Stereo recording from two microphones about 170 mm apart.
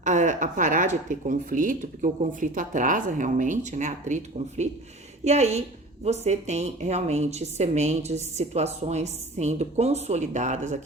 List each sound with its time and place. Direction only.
0.0 s a woman's voice: 45° right (ahead or behind)